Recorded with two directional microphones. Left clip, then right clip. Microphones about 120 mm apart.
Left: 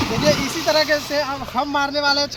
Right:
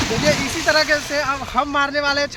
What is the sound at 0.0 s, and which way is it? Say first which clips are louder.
Speech: even; centre (ahead or behind).